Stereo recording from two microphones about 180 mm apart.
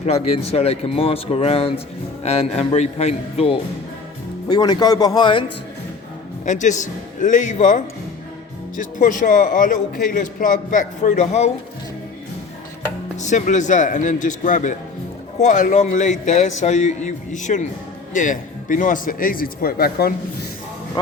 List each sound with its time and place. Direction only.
0.0 s a man's voice: 35° left (ahead or behind)
4.4 s speech: 25° left (ahead or behind)
6.4 s a man's voice: 45° left (ahead or behind)
13.1 s a man's voice: 40° left (ahead or behind); by 20.1 s 55° left (ahead or behind)